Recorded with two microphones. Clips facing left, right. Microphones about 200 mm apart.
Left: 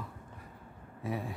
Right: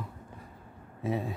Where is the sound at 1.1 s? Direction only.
25° right (ahead or behind).